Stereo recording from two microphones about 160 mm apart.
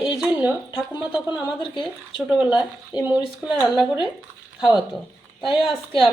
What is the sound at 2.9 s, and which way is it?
Speech, 30° left (ahead or behind).